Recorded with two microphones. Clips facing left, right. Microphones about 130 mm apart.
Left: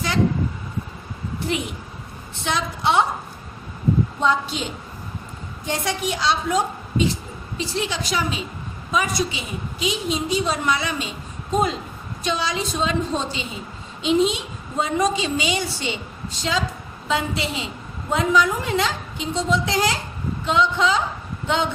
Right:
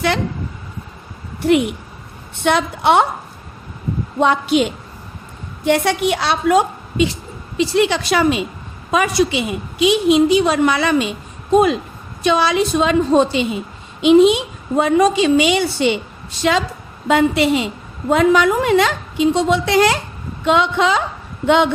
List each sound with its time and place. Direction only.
1.4 s a woman's voice: 60° right (ahead or behind)
4.2 s a woman's voice: 65° right (ahead or behind)